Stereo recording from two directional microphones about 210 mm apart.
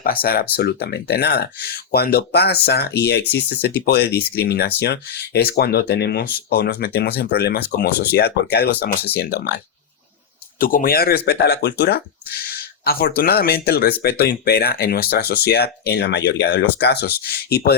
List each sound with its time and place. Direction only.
0.0 s speech: 45° left (ahead or behind)
10.6 s speech: 40° left (ahead or behind)